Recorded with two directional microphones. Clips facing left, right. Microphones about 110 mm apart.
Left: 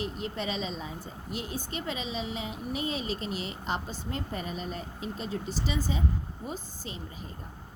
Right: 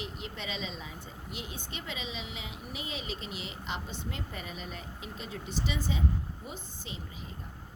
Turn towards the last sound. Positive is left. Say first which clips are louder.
# left 4 dB
turn(degrees=40)  # may be behind; listen again after turning